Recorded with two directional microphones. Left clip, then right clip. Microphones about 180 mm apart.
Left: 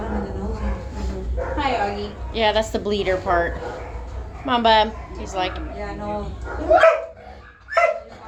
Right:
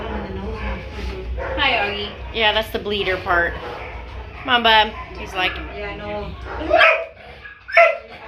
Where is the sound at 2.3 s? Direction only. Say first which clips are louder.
Right 1 dB; 30° left (ahead or behind).